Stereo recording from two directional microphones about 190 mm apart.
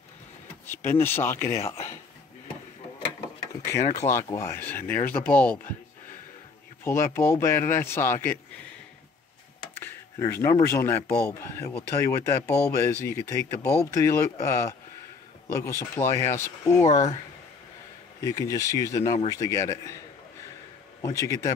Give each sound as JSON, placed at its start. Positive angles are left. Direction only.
{"t": 0.7, "sound": "speech", "side_deg": 10}
{"t": 1.5, "sound": "speech", "side_deg": 35}
{"t": 3.6, "sound": "speech", "side_deg": 15}
{"t": 6.8, "sound": "speech", "side_deg": 15}
{"t": 9.8, "sound": "speech", "side_deg": 15}
{"t": 16.8, "sound": "speech", "side_deg": 35}
{"t": 18.2, "sound": "speech", "side_deg": 15}
{"t": 21.0, "sound": "speech", "side_deg": 15}